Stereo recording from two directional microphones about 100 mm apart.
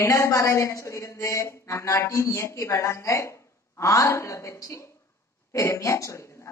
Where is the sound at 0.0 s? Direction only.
30° left (ahead or behind).